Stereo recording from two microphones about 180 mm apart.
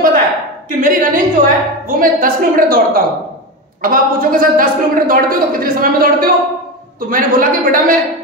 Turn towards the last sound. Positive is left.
turn(degrees=-50)  # may be behind; listen again after turning